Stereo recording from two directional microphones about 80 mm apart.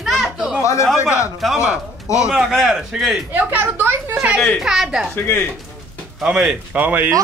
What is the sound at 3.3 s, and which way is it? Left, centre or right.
Speech, right.